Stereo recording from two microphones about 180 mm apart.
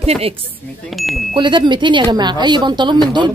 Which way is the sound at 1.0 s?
Centre (ahead or behind).